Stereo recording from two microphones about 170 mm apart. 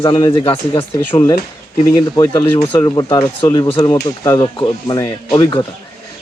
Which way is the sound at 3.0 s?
15° left (ahead or behind).